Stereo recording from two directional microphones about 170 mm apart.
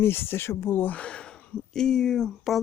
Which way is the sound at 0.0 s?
15° left (ahead or behind).